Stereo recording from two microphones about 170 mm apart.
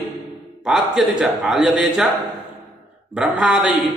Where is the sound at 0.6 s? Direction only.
Centre (ahead or behind).